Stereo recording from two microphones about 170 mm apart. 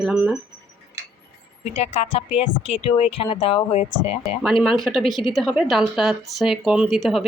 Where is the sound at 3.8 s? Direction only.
45° left (ahead or behind).